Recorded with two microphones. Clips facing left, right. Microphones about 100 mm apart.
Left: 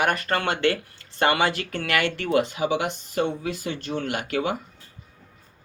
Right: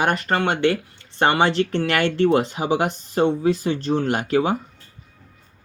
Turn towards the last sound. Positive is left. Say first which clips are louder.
# right 6 dB
turn(degrees=-35)  # may be behind; listen again after turning